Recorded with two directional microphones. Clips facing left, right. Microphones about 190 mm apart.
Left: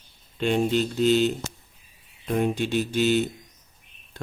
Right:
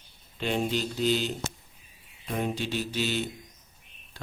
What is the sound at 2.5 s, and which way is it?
Speech, 50° left (ahead or behind).